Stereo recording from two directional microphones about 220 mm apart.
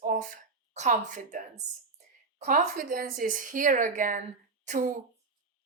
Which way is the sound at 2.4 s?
35° right (ahead or behind).